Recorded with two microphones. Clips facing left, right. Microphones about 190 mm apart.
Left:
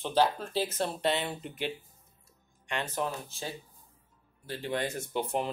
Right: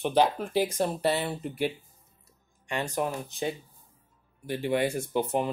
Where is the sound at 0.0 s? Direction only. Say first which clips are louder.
Right 3 dB; 15° right (ahead or behind).